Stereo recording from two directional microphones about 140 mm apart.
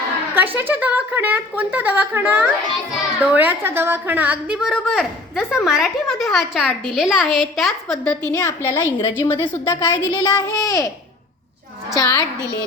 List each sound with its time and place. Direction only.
0.3 s speech: 15° right (ahead or behind); by 8.2 s 5° left (ahead or behind)
8.3 s a woman's voice: 25° left (ahead or behind)
11.9 s a woman's voice: 25° left (ahead or behind)